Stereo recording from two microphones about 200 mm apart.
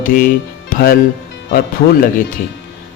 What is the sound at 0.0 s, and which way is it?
Speech, 45° left (ahead or behind).